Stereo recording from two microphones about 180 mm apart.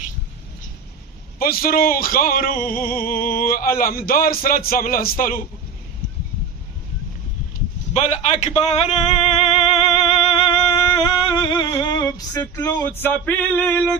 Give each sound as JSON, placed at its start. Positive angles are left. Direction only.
{"t": 1.4, "sound": "speech", "side_deg": 55}
{"t": 7.9, "sound": "speech", "side_deg": 40}
{"t": 9.8, "sound": "music", "side_deg": 35}
{"t": 11.7, "sound": "female singing", "side_deg": 20}
{"t": 12.4, "sound": "male singing", "side_deg": 10}